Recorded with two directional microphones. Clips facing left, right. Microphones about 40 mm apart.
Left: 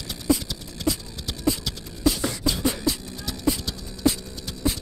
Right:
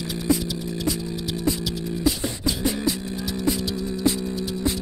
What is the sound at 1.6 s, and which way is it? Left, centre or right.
Beatboxing, centre.